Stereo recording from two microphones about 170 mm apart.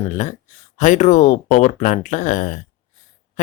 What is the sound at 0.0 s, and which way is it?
Speech, 45° left (ahead or behind).